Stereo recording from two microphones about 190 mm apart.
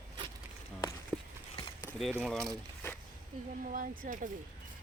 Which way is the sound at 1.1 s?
10° left (ahead or behind).